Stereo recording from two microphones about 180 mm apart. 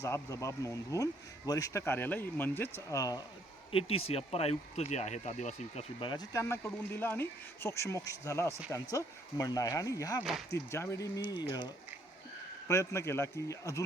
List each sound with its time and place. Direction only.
0.0 s speech: 15° left (ahead or behind)
3.7 s speech: 30° left (ahead or behind)
6.0 s speech: 25° left (ahead or behind)
6.4 s speech: 10° left (ahead or behind)